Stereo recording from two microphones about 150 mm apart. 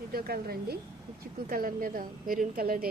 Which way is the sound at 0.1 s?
90° right.